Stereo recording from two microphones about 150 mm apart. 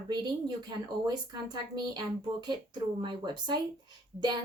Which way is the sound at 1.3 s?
30° right (ahead or behind).